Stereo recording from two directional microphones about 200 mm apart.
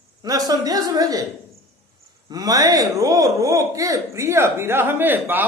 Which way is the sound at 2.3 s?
20° right (ahead or behind).